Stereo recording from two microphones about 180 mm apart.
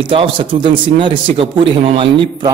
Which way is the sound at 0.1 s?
30° right (ahead or behind).